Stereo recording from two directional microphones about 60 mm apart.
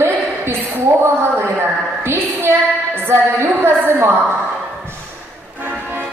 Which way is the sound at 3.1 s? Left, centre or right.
Right.